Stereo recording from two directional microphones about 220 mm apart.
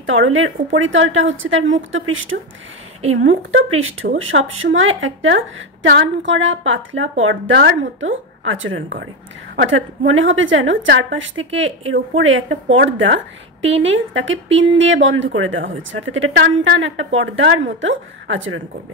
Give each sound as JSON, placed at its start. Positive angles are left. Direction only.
{"t": 0.0, "sound": "speech", "side_deg": -60}